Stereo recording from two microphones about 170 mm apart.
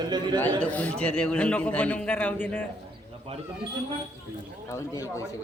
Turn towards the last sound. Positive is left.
turn(degrees=20)  # may be behind; listen again after turning